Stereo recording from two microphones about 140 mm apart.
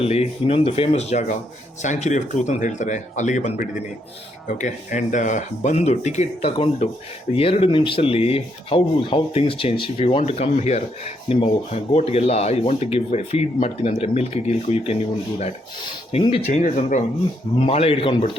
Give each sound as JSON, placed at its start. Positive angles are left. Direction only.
{"t": 0.0, "sound": "speech", "side_deg": 45}
{"t": 16.1, "sound": "speech", "side_deg": 40}
{"t": 16.5, "sound": "speech", "side_deg": 55}
{"t": 17.6, "sound": "speech", "side_deg": 45}